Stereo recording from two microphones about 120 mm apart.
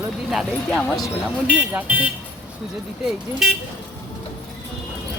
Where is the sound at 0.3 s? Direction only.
Centre (ahead or behind).